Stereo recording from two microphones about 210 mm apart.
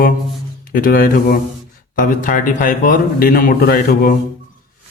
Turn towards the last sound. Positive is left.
turn(degrees=45)  # may be behind; listen again after turning